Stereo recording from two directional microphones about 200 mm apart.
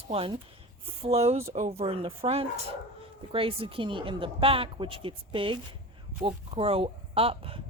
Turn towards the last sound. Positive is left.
turn(degrees=-30)  # may be behind; listen again after turning